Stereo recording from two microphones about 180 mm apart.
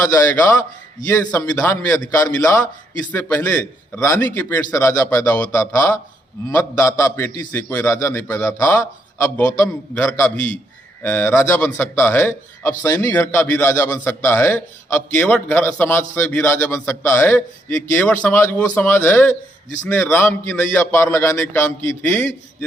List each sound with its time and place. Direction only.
1.1 s speech: 15° left (ahead or behind)